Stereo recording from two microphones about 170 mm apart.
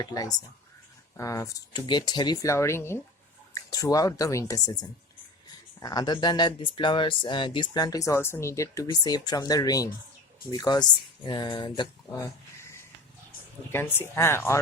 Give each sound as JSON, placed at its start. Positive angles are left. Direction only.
{"t": 0.0, "sound": "speech", "side_deg": 20}